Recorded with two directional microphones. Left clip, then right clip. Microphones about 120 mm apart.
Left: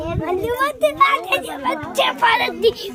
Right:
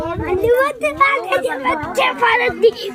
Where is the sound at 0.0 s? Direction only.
20° left (ahead or behind).